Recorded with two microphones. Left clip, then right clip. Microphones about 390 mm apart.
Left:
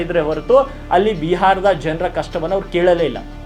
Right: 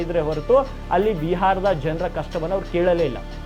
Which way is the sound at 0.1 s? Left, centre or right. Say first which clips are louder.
Left 5 dB; right.